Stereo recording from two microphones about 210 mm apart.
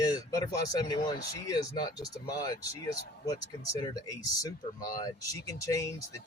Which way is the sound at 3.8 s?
20° left (ahead or behind).